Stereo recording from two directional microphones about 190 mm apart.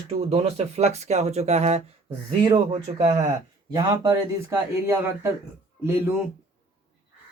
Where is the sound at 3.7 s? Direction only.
20° right (ahead or behind).